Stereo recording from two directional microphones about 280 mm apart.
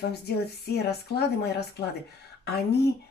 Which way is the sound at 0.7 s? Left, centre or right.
Left.